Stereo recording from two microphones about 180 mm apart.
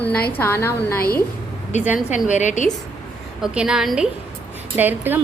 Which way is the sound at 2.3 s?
40° left (ahead or behind).